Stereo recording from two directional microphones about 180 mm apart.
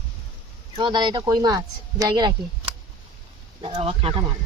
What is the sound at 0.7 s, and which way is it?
Speech, 25° right (ahead or behind).